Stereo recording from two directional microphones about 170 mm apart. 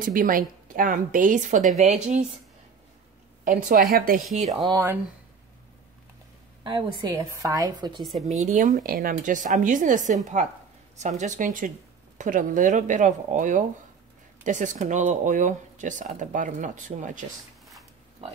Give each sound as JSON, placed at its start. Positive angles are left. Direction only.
{"t": 0.0, "sound": "speech", "side_deg": -55}
{"t": 3.4, "sound": "a woman's voice", "side_deg": -55}
{"t": 4.6, "sound": "a woman's voice", "side_deg": -25}
{"t": 6.6, "sound": "a woman's voice", "side_deg": -25}
{"t": 8.0, "sound": "a woman's voice", "side_deg": 0}
{"t": 8.3, "sound": "speech", "side_deg": -45}